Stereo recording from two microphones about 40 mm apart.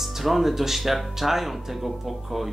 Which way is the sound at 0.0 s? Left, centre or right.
Centre.